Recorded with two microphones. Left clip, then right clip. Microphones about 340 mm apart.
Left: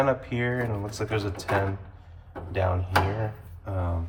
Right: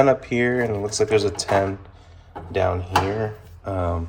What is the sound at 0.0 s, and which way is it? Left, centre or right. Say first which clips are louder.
Speech: right 7 dB; centre.